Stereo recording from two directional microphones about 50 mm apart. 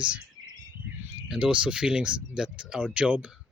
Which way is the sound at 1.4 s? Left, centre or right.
Right.